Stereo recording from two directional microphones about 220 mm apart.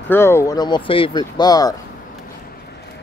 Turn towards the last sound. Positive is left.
turn(degrees=15)  # may be behind; listen again after turning